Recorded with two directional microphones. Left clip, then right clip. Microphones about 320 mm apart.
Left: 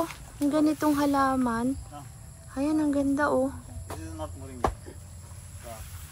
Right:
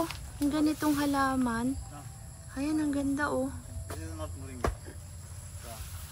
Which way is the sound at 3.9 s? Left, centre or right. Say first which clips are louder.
Left 4 dB; centre.